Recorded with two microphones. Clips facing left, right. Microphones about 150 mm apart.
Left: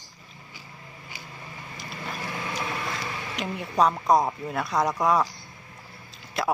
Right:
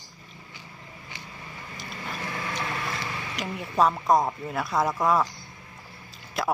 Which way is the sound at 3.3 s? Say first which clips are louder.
Left 1 dB; centre (ahead or behind).